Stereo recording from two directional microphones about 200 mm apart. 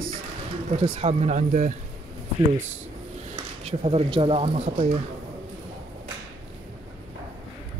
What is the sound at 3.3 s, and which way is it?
Speech, 30° right (ahead or behind).